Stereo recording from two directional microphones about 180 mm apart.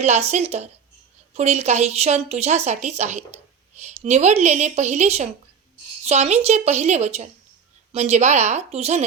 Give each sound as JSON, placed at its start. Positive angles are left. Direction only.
{"t": 0.0, "sound": "a woman's voice", "side_deg": -40}